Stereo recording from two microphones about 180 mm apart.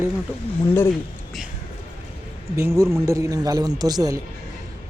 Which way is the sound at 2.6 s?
15° right (ahead or behind).